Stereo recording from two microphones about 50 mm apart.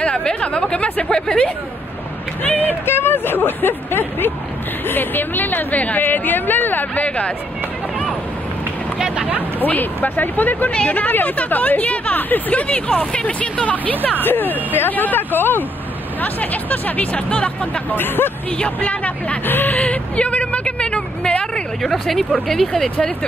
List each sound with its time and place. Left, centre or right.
0.0 s speech: centre
1.1 s speech: centre
2.4 s speech: left
8.9 s a sound: centre
9.6 s speech: left
14.2 s speech: left
17.9 s speech: left
18.6 s speech: left
19.4 s speech: left
19.8 s vehicle: left
21.8 s speech: centre